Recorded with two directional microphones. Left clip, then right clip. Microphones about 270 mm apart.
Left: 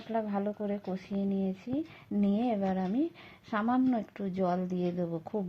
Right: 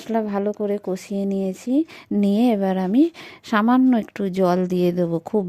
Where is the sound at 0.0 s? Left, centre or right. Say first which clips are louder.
Right 10 dB; right.